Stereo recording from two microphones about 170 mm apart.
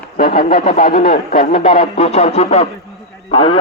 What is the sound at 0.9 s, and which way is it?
Speech, 55° left (ahead or behind).